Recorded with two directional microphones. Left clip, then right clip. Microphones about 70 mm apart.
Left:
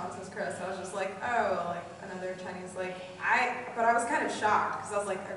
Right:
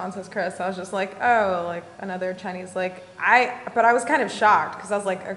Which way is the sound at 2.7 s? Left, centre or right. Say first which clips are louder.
Right 10 dB; right.